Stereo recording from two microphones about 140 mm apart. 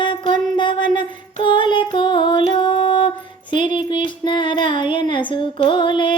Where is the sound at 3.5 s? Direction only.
35° left (ahead or behind).